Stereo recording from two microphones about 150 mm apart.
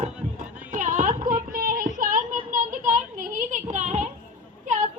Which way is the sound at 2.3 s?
60° right (ahead or behind).